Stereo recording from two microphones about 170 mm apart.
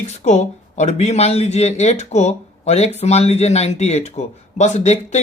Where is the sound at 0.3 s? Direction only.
40° left (ahead or behind).